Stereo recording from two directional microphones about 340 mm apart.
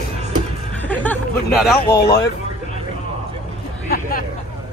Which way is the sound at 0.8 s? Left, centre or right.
Centre.